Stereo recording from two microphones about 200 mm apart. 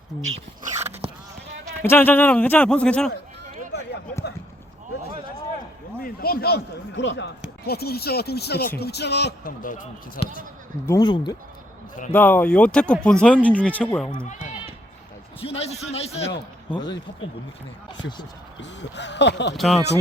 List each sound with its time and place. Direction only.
0.6 s a sound: 35° right (ahead or behind)
1.8 s speech: 10° left (ahead or behind)
3.7 s a sound: 55° left (ahead or behind)
6.0 s a man's voice: 50° left (ahead or behind); by 7.3 s 65° left (ahead or behind)
7.6 s a man's voice: 50° left (ahead or behind)
10.8 s speech: 20° left (ahead or behind)
12.1 s speech: 10° left (ahead or behind)
15.4 s a man's voice: 30° left (ahead or behind)
17.9 s speech: 20° left (ahead or behind)
18.6 s speech: 60° left (ahead or behind)